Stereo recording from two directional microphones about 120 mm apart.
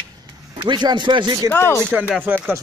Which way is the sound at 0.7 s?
40° right (ahead or behind).